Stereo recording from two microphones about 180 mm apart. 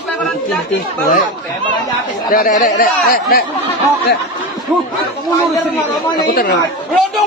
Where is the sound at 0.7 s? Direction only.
45° left (ahead or behind).